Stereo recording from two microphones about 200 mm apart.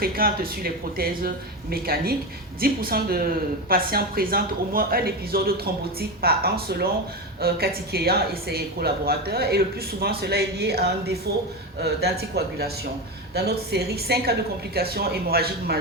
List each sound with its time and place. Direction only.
0.0 s a woman's voice: 50° right (ahead or behind)